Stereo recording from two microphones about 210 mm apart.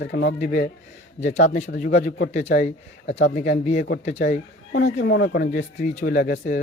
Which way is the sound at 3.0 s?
60° left (ahead or behind).